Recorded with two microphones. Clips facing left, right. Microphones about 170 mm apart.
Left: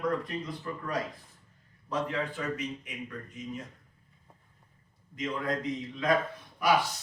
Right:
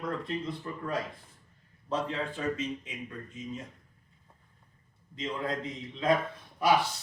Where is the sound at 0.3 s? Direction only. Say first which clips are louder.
Right 1 dB; 25° right (ahead or behind).